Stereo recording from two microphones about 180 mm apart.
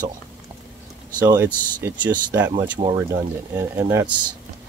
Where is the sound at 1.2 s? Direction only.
15° right (ahead or behind).